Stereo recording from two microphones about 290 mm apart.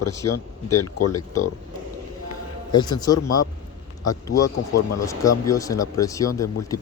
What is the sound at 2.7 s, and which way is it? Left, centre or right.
Speech, centre.